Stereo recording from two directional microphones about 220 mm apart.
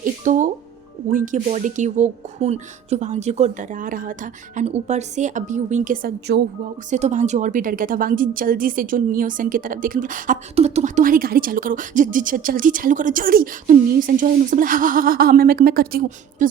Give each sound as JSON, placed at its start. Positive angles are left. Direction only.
{"t": 0.0, "sound": "a woman's voice", "side_deg": -35}
{"t": 6.9, "sound": "a woman's voice", "side_deg": -35}